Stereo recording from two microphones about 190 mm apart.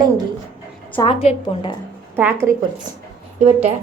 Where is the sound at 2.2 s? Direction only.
10° right (ahead or behind).